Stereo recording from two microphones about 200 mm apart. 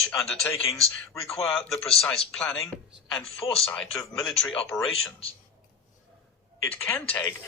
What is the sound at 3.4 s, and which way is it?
Speech, 30° left (ahead or behind).